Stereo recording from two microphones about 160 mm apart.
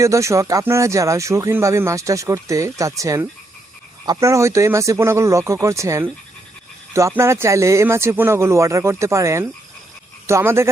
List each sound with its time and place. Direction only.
0.0 s speech: 20° right (ahead or behind)